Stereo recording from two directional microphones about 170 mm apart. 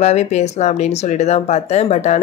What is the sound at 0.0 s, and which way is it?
Speech, 40° left (ahead or behind).